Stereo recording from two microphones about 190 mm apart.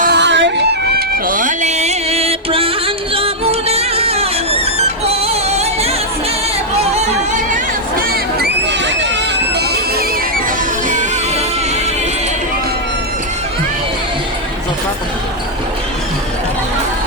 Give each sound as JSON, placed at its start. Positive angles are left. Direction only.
{"t": 0.0, "sound": "music", "side_deg": -60}
{"t": 1.3, "sound": "music", "side_deg": -45}
{"t": 7.5, "sound": "a sound", "side_deg": -50}